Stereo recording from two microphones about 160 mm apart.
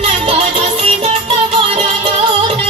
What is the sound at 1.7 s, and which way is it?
Music, 35° right (ahead or behind).